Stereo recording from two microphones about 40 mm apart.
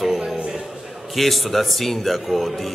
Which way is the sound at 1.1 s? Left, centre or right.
Centre.